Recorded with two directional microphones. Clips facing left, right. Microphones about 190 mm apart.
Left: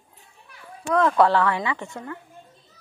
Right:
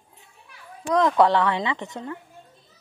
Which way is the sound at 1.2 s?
20° right (ahead or behind).